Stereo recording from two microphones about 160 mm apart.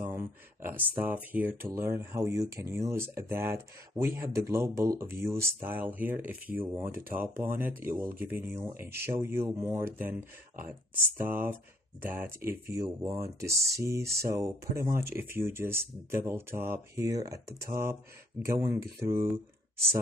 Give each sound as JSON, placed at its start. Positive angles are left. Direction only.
{"t": 0.0, "sound": "speech", "side_deg": -15}
{"t": 11.2, "sound": "speech", "side_deg": -15}